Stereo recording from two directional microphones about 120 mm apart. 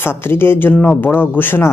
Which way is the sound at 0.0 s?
20° left (ahead or behind).